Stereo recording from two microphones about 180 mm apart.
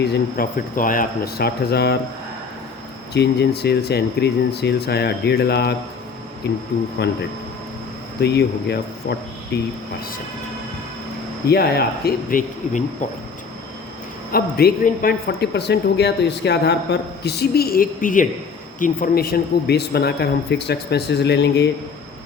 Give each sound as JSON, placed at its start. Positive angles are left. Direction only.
{"t": 0.0, "sound": "a man's voice", "side_deg": 60}
{"t": 3.1, "sound": "a man's voice", "side_deg": 65}
{"t": 8.2, "sound": "a man's voice", "side_deg": 65}
{"t": 11.4, "sound": "a man's voice", "side_deg": 60}
{"t": 14.3, "sound": "a man's voice", "side_deg": 55}